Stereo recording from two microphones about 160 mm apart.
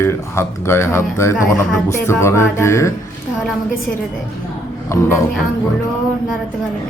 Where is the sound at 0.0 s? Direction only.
15° left (ahead or behind).